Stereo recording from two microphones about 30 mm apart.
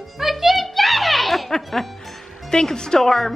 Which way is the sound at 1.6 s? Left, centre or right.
Centre.